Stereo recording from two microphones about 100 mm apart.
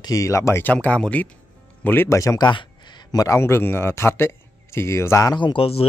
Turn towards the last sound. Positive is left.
turn(degrees=70)  # may be behind; listen again after turning